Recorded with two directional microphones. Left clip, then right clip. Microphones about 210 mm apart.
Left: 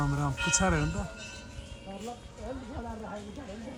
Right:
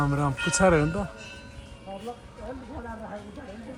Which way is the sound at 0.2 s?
15° left (ahead or behind).